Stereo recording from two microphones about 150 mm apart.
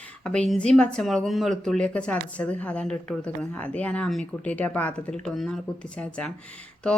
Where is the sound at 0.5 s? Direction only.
5° left (ahead or behind).